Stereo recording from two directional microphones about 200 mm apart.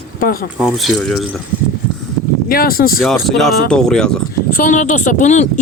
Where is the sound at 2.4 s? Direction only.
45° left (ahead or behind).